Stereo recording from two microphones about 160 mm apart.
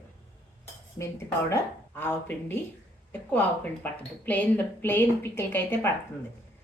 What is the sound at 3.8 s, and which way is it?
A woman's voice, 10° left (ahead or behind).